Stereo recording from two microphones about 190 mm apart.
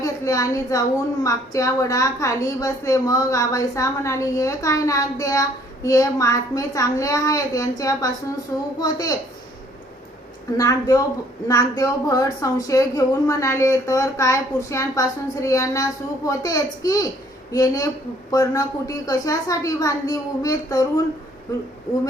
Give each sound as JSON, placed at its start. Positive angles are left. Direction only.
{"t": 0.0, "sound": "a woman's voice", "side_deg": 15}
{"t": 10.6, "sound": "a woman's voice", "side_deg": 20}